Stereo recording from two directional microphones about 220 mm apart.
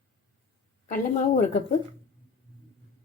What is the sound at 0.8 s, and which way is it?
Speech, 35° left (ahead or behind).